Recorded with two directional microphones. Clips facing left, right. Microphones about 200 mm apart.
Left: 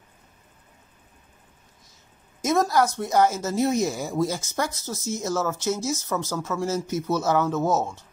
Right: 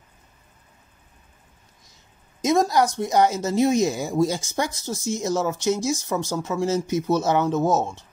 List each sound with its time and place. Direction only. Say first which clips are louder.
2.4 s a woman's voice: right 2 dB; 15° right (ahead or behind)